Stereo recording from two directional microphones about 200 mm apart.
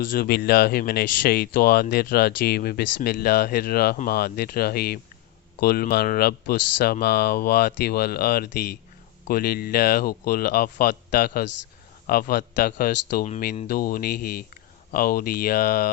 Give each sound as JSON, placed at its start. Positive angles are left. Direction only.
{"t": 0.0, "sound": "speech", "side_deg": 45}